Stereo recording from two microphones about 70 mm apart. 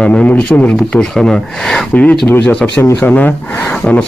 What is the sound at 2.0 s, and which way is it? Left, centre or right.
Speech, left.